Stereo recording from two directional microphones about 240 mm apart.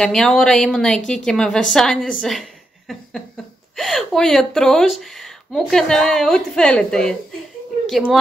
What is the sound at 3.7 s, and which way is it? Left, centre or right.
A woman's voice, centre.